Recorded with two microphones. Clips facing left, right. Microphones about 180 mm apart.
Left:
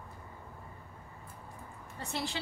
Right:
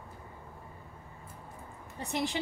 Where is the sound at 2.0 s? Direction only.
15° right (ahead or behind).